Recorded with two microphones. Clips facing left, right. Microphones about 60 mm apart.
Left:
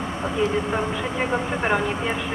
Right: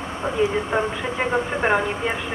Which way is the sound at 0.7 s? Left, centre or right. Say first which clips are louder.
Right 2 dB; centre.